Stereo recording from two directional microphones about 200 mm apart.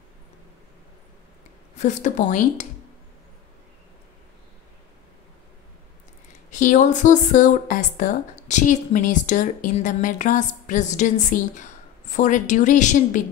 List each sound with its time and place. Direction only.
1.8 s speech: 35° left (ahead or behind)
6.5 s speech: 40° left (ahead or behind)